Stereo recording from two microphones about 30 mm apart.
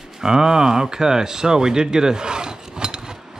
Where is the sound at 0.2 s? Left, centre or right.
Right.